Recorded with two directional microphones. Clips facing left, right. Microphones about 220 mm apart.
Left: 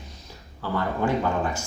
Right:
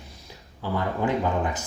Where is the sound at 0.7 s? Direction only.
15° right (ahead or behind).